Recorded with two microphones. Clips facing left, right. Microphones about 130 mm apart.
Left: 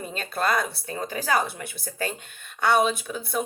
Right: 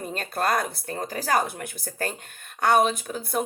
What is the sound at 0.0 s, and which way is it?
Speech, 45° right (ahead or behind).